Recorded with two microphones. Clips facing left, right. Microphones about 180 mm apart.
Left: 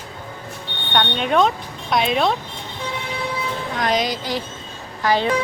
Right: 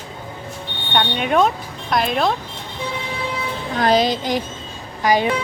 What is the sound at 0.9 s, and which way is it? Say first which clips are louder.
Speech: right 1 dB; 5° right (ahead or behind).